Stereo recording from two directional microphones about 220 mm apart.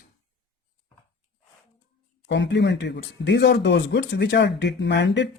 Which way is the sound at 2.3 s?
55° left (ahead or behind).